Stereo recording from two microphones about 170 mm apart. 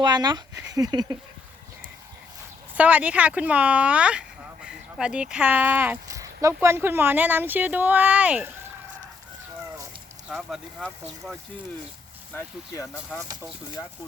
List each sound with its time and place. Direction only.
0.0 s speech: 25° right (ahead or behind)
2.7 s speech: 10° right (ahead or behind)
10.2 s speech: centre (ahead or behind)
12.3 s speech: 15° left (ahead or behind)